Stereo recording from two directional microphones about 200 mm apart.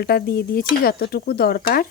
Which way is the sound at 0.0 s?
50° left (ahead or behind).